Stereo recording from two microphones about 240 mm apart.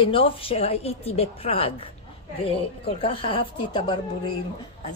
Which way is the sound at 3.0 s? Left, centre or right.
Left.